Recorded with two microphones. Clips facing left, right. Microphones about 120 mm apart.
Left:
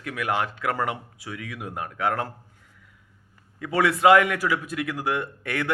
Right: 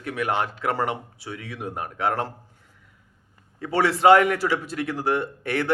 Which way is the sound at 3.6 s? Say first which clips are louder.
Right 1 dB; 30° right (ahead or behind).